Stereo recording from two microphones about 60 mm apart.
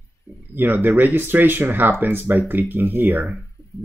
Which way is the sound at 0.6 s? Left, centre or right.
Right.